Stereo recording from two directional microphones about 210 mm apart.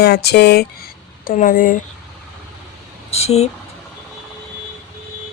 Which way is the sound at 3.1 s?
30° left (ahead or behind).